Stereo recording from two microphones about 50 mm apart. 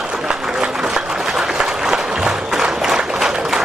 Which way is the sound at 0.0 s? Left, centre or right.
Centre.